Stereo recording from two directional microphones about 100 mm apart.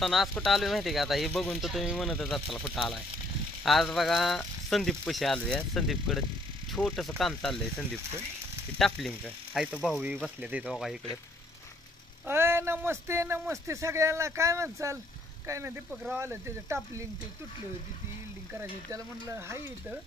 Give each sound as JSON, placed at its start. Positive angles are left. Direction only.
{"t": 0.0, "sound": "speech", "side_deg": 0}
{"t": 12.3, "sound": "speech", "side_deg": -25}
{"t": 15.9, "sound": "speech", "side_deg": -10}
{"t": 16.2, "sound": "speech", "side_deg": -25}
{"t": 18.5, "sound": "speech", "side_deg": -25}